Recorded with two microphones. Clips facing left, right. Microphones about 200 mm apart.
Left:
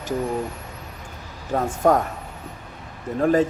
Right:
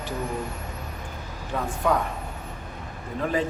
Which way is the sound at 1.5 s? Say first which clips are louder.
Left 6 dB; 45° left (ahead or behind).